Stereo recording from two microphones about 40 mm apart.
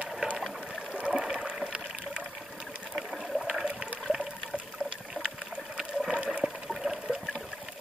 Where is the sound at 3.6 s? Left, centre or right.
Right.